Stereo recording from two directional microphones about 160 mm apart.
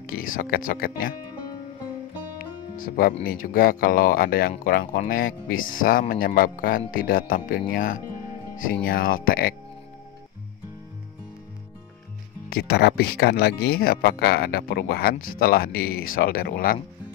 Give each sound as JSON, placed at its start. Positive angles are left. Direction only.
{"t": 0.0, "sound": "speech", "side_deg": 60}
{"t": 2.8, "sound": "speech", "side_deg": 65}
{"t": 12.4, "sound": "speech", "side_deg": 80}